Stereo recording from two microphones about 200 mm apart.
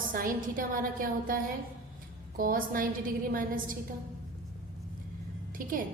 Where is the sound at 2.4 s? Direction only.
45° right (ahead or behind).